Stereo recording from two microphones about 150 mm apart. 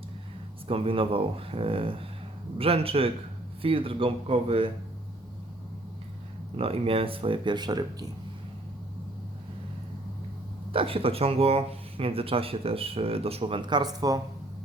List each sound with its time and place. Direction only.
0.7 s speech: 40° right (ahead or behind)
6.6 s speech: 40° right (ahead or behind)
10.7 s speech: 40° right (ahead or behind)